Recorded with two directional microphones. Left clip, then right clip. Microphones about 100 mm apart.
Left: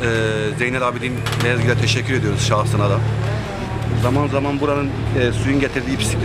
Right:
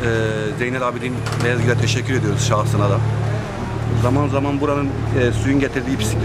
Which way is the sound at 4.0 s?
Centre (ahead or behind).